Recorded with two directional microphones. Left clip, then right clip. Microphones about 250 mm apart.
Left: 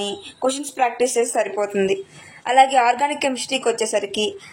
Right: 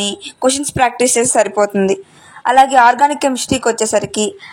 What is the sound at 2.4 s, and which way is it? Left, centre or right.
Speech, right.